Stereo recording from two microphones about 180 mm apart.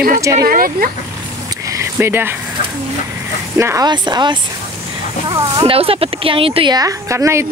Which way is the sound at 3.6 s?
15° right (ahead or behind).